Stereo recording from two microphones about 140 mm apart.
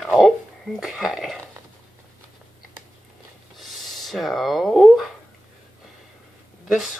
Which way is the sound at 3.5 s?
Centre (ahead or behind).